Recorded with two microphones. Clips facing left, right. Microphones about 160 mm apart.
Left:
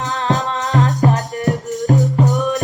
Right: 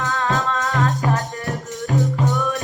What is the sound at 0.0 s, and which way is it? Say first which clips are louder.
Music: left 2 dB; 20° left (ahead or behind).